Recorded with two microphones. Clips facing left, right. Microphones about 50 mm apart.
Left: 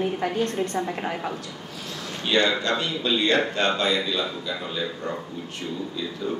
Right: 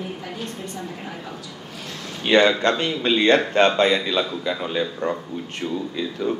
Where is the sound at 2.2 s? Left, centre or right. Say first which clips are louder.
Right 6 dB; right.